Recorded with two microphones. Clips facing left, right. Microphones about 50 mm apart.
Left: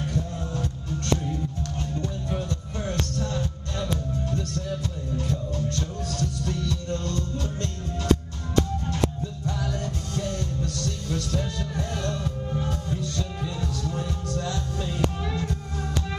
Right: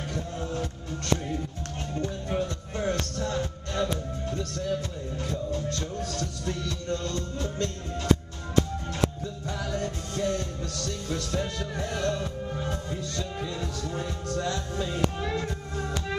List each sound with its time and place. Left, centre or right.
2.0 s music: centre
6.1 s music: right
9.7 s music: centre